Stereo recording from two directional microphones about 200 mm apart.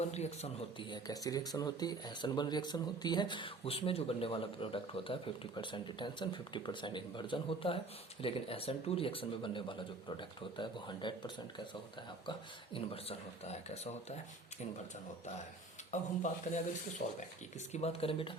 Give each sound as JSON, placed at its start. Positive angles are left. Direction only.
{"t": 0.0, "sound": "speech", "side_deg": 35}
{"t": 15.9, "sound": "speech", "side_deg": 35}